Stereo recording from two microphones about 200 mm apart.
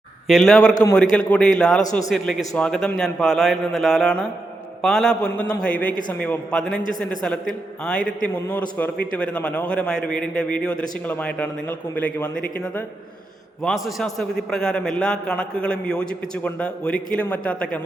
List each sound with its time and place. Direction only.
0.3 s a man's voice: centre (ahead or behind)
1.8 s a man's voice: 40° left (ahead or behind)
2.0 s a man's voice: centre (ahead or behind)